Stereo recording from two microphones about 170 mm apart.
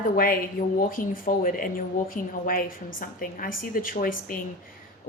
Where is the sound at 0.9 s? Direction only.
55° left (ahead or behind).